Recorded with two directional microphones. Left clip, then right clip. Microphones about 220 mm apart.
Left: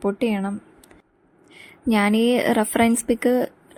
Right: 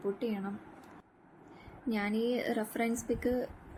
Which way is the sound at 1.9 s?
45° left (ahead or behind).